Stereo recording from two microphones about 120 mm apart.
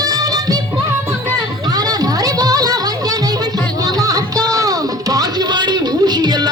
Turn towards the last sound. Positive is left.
turn(degrees=-35)  # may be behind; listen again after turning